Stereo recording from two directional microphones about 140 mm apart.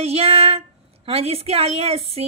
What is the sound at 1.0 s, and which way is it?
A woman's voice, 45° right (ahead or behind).